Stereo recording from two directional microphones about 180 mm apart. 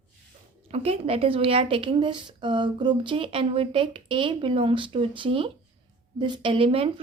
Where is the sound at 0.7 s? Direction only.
35° right (ahead or behind).